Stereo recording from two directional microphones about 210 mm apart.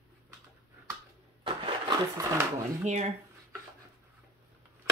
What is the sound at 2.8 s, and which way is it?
Speech, 30° right (ahead or behind).